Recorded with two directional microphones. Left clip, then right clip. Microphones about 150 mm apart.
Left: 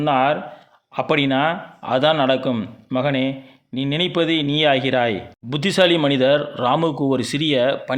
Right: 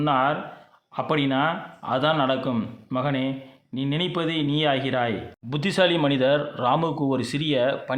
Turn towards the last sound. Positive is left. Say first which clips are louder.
# left 5 dB
turn(degrees=25)  # may be behind; listen again after turning